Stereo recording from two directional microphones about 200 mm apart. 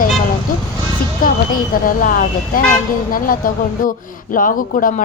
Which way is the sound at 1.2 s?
45° left (ahead or behind).